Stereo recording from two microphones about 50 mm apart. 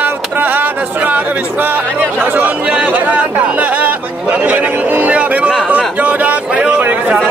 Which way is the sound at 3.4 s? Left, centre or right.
Right.